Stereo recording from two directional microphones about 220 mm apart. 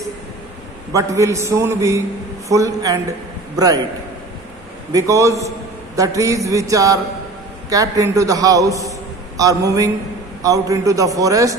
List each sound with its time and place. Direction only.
0.9 s a man's voice: 15° right (ahead or behind)
4.9 s a man's voice: 15° right (ahead or behind)